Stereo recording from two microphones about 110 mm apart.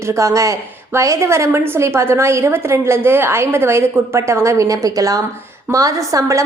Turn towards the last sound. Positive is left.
turn(degrees=-30)  # may be behind; listen again after turning